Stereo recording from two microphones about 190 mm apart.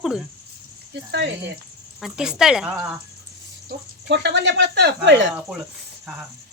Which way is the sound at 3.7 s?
65° right (ahead or behind).